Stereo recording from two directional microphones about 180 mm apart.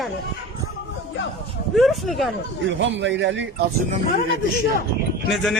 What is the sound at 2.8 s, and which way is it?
Speech, 90° right.